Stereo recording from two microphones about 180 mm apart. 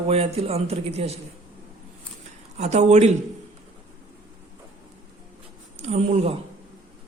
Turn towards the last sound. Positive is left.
turn(degrees=-35)  # may be behind; listen again after turning